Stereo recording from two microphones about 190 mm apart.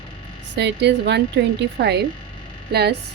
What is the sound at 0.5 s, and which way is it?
Speech, 65° right (ahead or behind).